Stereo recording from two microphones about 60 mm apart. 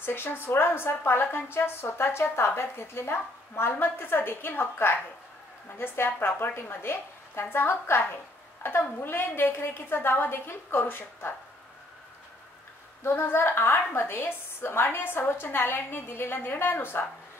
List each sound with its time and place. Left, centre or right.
0.0 s a woman's voice: left
13.0 s a woman's voice: left